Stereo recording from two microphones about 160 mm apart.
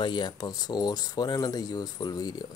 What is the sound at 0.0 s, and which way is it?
Speech, 25° left (ahead or behind).